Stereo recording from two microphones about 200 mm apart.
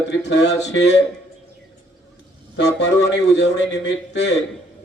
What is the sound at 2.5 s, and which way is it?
A man's voice, 60° left (ahead or behind).